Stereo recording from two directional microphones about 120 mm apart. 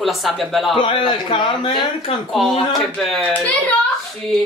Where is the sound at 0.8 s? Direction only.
45° left (ahead or behind).